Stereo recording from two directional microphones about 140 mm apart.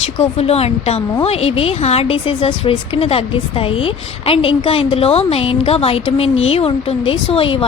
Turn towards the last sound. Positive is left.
turn(degrees=40)  # may be behind; listen again after turning